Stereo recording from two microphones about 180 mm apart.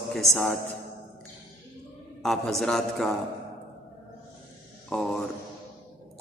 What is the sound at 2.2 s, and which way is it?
Speech, 5° left (ahead or behind).